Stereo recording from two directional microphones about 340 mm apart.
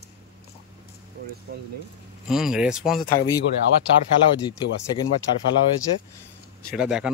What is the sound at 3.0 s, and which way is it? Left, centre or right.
Speech, left.